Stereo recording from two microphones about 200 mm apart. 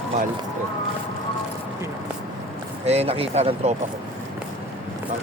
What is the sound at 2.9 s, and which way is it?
Speech, 30° right (ahead or behind).